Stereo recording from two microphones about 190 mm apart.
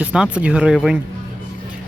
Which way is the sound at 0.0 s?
5° right (ahead or behind).